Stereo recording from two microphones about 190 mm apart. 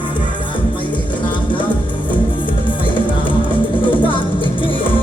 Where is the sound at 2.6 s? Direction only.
25° left (ahead or behind).